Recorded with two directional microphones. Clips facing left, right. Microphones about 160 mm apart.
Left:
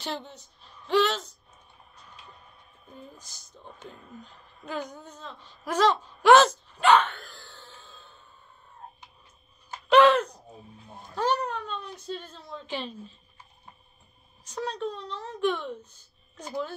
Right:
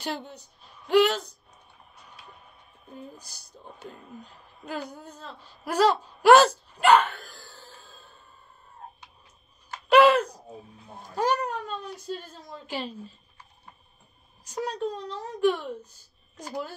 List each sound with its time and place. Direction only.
0.0 s a woman's voice: 10° right (ahead or behind)
2.9 s a woman's voice: 10° right (ahead or behind)
6.8 s a sound: 10° right (ahead or behind)
9.8 s a sound: 10° right (ahead or behind)
11.1 s a woman's voice: 10° right (ahead or behind)
14.5 s a woman's voice: 10° right (ahead or behind)